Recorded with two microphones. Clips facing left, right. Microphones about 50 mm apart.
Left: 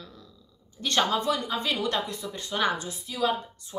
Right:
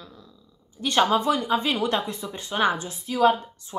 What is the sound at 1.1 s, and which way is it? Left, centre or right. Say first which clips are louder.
A woman's voice: right 5 dB; right.